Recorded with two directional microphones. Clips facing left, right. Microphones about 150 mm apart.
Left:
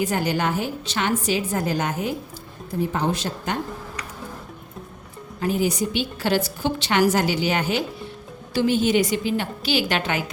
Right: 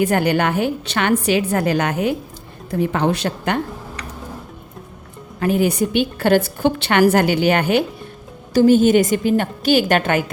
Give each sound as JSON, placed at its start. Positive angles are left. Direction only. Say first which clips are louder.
{"t": 0.0, "sound": "a woman's voice", "louder": "right 6 dB", "side_deg": -60}
{"t": 5.4, "sound": "a woman's voice", "louder": "right 5 dB", "side_deg": -60}
{"t": 8.5, "sound": "a woman's voice", "louder": "right 7 dB", "side_deg": -45}